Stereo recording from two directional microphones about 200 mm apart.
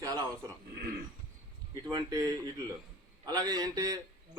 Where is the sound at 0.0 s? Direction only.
20° right (ahead or behind).